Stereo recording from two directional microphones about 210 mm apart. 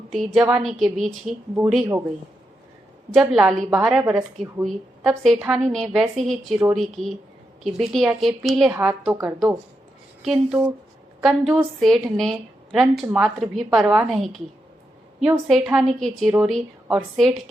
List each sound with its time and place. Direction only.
0.1 s a woman's voice: centre (ahead or behind)
3.1 s a woman's voice: 5° right (ahead or behind)